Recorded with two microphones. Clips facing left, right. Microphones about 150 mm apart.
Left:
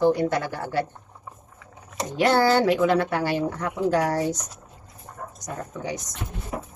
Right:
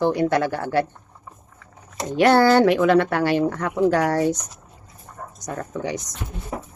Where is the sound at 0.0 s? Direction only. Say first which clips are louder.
Right 2 dB; 75° right (ahead or behind).